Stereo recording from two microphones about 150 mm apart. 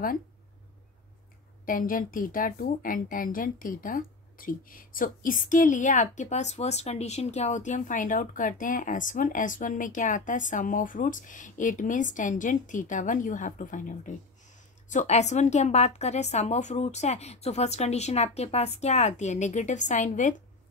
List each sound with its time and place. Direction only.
1.7 s a woman's voice: 65° left (ahead or behind)